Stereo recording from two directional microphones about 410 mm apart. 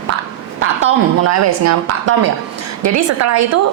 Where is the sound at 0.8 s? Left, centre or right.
Right.